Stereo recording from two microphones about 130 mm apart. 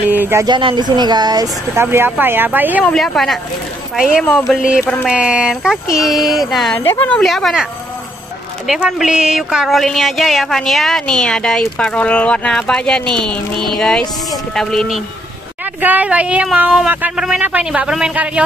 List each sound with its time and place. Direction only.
0.1 s speech: 15° right (ahead or behind)
0.5 s speech: 35° right (ahead or behind)
1.8 s speech: 20° right (ahead or behind)
2.8 s speech: 5° left (ahead or behind)
4.2 s speech: 5° left (ahead or behind)
4.8 s a woman's voice: 5° left (ahead or behind)
5.1 s speech: 5° right (ahead or behind)
6.8 s a woman's voice: 15° left (ahead or behind)
7.2 s speech: centre (ahead or behind)
8.6 s speech: 5° right (ahead or behind)
15.8 s speech: 10° right (ahead or behind)